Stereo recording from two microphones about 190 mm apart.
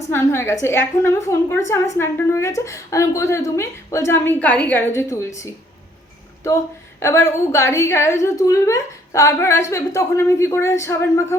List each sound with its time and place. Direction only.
0.0 s a woman's voice: 15° left (ahead or behind)
7.0 s a woman's voice: 15° left (ahead or behind)